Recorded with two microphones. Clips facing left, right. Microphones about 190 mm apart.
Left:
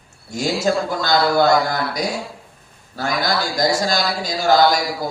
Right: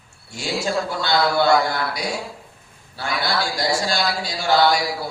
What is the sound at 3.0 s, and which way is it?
Speech, 40° left (ahead or behind).